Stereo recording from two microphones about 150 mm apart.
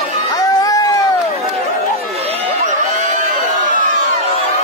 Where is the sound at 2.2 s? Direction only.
45° right (ahead or behind).